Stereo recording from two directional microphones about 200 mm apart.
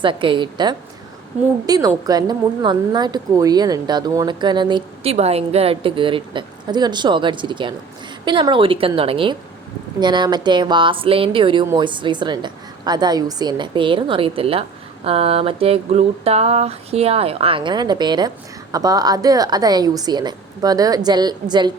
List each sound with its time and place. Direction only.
0.0 s a woman's voice: 25° right (ahead or behind)